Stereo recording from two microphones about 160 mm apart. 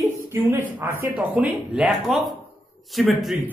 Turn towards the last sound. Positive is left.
turn(degrees=0)  # may be behind; listen again after turning